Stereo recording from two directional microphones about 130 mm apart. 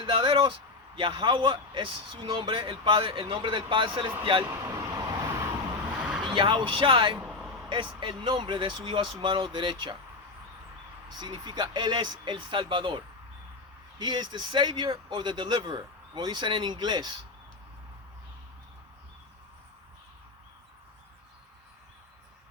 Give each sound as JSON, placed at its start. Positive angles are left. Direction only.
{"t": 0.0, "sound": "a sound", "side_deg": -40}
{"t": 0.9, "sound": "speech", "side_deg": -40}
{"t": 4.4, "sound": "vehicle", "side_deg": -20}
{"t": 6.0, "sound": "vehicle", "side_deg": -5}
{"t": 6.2, "sound": "speech", "side_deg": -40}
{"t": 7.2, "sound": "a sound", "side_deg": -10}
{"t": 7.7, "sound": "speech", "side_deg": -40}
{"t": 11.2, "sound": "speech", "side_deg": -35}
{"t": 14.0, "sound": "speech", "side_deg": -35}